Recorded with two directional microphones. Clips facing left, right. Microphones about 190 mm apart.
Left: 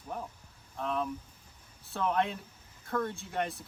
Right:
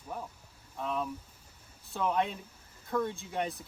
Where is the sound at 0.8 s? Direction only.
5° right (ahead or behind).